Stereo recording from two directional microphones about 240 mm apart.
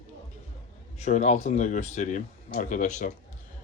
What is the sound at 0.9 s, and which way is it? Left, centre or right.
Speech, left.